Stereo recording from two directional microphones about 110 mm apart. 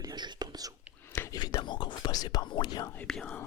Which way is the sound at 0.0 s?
40° right (ahead or behind).